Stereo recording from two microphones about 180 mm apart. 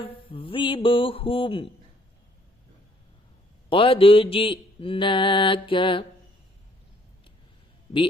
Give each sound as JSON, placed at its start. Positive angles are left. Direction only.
{"t": 0.0, "sound": "mantra", "side_deg": 30}
{"t": 3.7, "sound": "mantra", "side_deg": 30}